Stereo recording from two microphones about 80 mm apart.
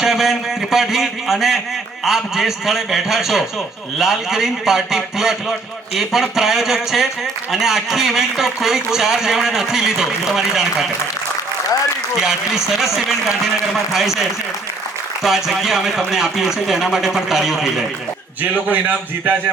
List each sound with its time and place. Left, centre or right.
0.0 s a man's voice: centre
12.2 s a man's voice: centre
15.2 s a man's voice: centre
18.5 s a man's voice: centre